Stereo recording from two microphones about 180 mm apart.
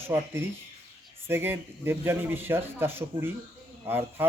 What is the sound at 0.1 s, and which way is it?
Speech, 15° right (ahead or behind).